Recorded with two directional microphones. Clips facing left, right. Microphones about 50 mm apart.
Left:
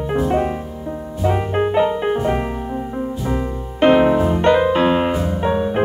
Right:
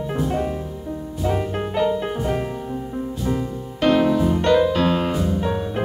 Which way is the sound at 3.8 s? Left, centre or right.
Left.